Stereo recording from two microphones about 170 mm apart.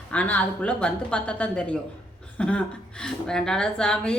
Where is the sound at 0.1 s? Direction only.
10° left (ahead or behind).